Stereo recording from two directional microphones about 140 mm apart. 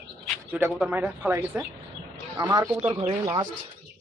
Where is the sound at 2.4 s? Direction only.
30° right (ahead or behind).